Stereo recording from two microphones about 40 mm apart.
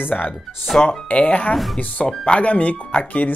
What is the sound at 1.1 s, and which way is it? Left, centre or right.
Speech, left.